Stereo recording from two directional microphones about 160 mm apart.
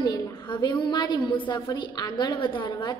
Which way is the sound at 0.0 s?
20° left (ahead or behind).